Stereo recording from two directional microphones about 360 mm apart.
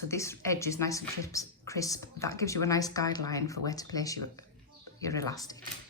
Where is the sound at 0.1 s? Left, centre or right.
Centre.